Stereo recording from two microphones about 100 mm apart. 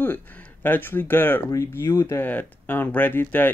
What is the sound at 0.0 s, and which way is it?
Speech, 20° left (ahead or behind).